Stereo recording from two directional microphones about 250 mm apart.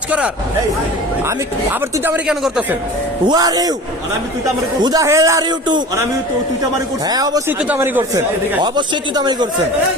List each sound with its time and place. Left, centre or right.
2.0 s speech: centre
3.2 s speech: centre
4.8 s speech: centre
7.1 s speech: centre